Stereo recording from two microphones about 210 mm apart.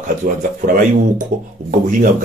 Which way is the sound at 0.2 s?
40° right (ahead or behind).